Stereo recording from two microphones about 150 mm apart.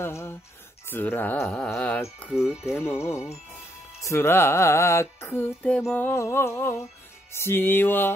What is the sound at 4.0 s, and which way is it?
Music, 20° left (ahead or behind).